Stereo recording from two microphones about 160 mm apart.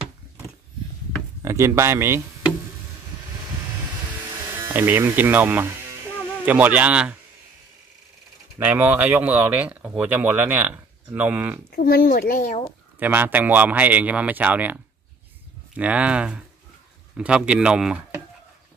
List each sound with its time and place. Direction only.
1.4 s speech: 15° right (ahead or behind)
4.5 s speech: 15° right (ahead or behind)
8.5 s speech: 10° right (ahead or behind)
11.7 s a child's voice: 65° left (ahead or behind)
13.0 s speech: 10° right (ahead or behind)